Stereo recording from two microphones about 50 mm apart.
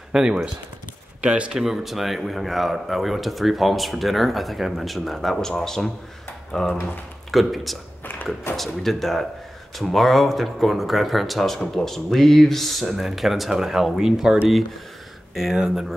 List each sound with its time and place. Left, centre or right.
0.1 s speech: centre
1.2 s speech: right
1.6 s a man's voice: centre
8.0 s a sound: left
8.5 s speech: centre